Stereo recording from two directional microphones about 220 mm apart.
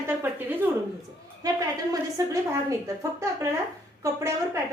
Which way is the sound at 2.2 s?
15° right (ahead or behind).